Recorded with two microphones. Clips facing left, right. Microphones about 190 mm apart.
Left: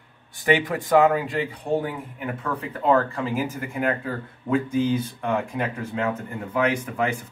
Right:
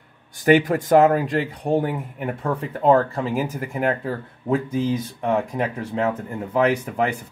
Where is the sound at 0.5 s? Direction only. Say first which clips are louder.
Right 5 dB; 45° right (ahead or behind).